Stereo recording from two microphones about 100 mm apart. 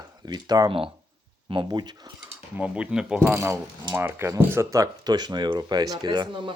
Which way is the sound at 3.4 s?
30° right (ahead or behind).